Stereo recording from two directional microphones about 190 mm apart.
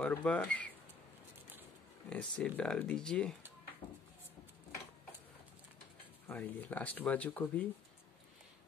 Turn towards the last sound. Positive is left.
turn(degrees=10)  # may be behind; listen again after turning